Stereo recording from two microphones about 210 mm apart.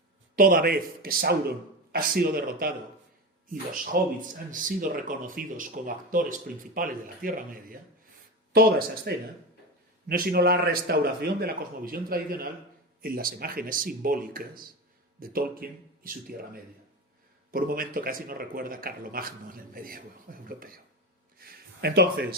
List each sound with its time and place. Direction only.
0.3 s speech: 45° right (ahead or behind)
3.9 s speech: 45° right (ahead or behind)
9.1 s speech: 50° right (ahead or behind)
21.3 s a sound: 50° right (ahead or behind)